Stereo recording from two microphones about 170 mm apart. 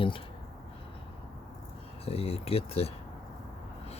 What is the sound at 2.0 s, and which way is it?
Speech, 35° left (ahead or behind).